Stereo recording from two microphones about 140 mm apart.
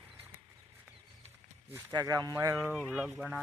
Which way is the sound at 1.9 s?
25° right (ahead or behind).